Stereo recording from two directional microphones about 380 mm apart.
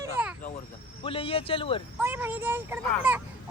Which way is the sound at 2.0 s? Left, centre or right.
Centre.